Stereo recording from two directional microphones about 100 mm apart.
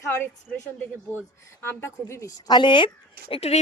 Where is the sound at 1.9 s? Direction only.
35° left (ahead or behind); by 2.8 s 50° left (ahead or behind).